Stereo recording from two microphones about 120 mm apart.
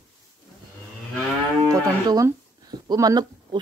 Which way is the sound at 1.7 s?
30° right (ahead or behind).